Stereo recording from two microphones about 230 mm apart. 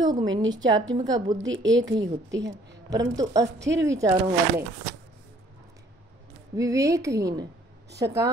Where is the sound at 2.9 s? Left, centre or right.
Centre.